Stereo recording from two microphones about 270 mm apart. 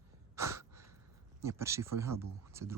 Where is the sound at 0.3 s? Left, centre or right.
Centre.